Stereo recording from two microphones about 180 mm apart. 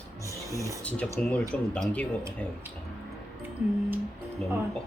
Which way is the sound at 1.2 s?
5° left (ahead or behind).